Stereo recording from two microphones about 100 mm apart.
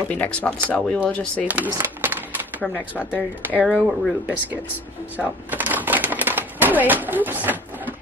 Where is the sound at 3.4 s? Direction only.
20° right (ahead or behind).